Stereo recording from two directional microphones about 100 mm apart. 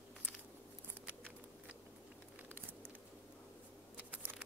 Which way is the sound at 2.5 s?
20° right (ahead or behind).